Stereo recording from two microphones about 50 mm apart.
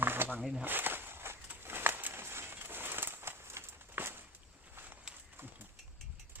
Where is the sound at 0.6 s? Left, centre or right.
Right.